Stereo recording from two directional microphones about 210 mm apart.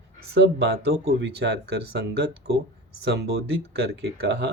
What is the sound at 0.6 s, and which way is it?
Speech, 50° right (ahead or behind).